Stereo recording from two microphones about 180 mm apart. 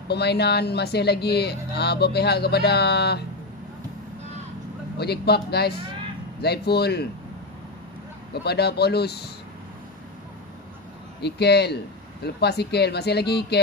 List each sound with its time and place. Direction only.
0.1 s speech: 65° left (ahead or behind)
4.9 s speech: 65° left (ahead or behind)
8.3 s speech: 65° left (ahead or behind)
11.1 s speech: 65° left (ahead or behind)